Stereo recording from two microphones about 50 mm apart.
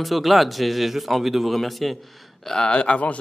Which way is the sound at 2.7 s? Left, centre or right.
Left.